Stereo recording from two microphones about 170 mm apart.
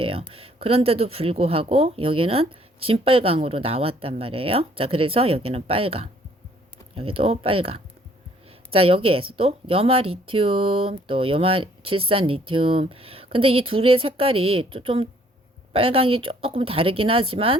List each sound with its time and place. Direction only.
0.0 s a woman's voice: 35° right (ahead or behind)